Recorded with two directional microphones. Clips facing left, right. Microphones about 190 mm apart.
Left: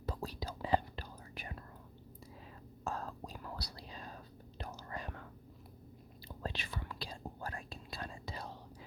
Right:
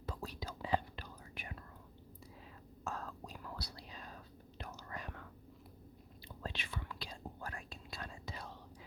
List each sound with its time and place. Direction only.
0.0 s whispering: 35° left (ahead or behind)
2.8 s whispering: 35° left (ahead or behind)
6.2 s whispering: 35° left (ahead or behind)